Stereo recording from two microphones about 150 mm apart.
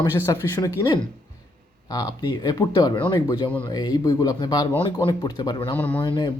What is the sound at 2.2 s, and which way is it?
Speech, 25° left (ahead or behind).